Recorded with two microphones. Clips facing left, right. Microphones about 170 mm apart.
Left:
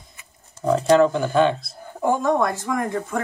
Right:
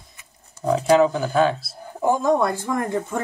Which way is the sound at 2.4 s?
30° right (ahead or behind).